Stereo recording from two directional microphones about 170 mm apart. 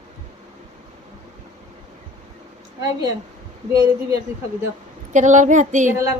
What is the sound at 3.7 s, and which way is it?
Speech, 20° right (ahead or behind).